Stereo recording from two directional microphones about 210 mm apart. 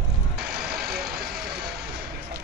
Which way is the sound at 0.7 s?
50° right (ahead or behind).